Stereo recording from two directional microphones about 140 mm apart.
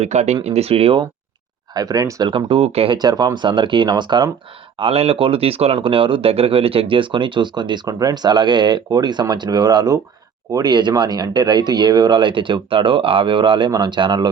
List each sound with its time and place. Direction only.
0.0 s speech: 50° right (ahead or behind)
1.7 s speech: 25° right (ahead or behind)
2.3 s speech: 40° right (ahead or behind)